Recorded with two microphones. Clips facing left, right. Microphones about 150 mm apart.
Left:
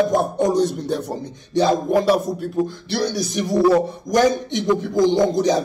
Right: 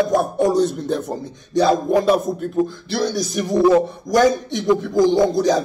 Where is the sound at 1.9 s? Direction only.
10° left (ahead or behind).